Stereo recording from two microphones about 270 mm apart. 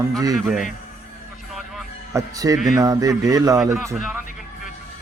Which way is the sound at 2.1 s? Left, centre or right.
Centre.